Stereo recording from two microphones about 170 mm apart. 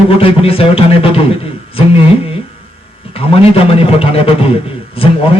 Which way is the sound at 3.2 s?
35° left (ahead or behind).